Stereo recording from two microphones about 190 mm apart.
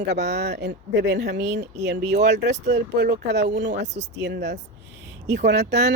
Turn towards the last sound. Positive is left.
turn(degrees=-65)  # may be behind; listen again after turning